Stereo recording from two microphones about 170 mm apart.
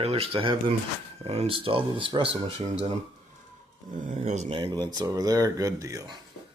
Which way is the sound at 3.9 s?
50° right (ahead or behind).